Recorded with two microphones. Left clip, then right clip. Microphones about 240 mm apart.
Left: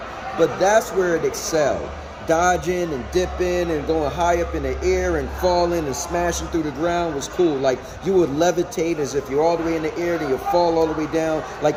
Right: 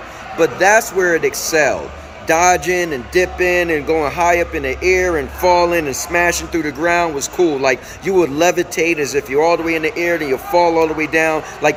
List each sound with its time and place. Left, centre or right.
0.3 s a man's voice: centre
0.9 s speech: right
1.2 s a man's voice: centre